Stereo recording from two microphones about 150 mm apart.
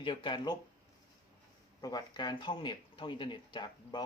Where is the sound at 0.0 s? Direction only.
35° left (ahead or behind).